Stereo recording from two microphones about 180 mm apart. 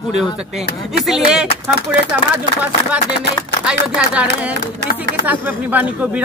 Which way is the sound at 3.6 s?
5° right (ahead or behind).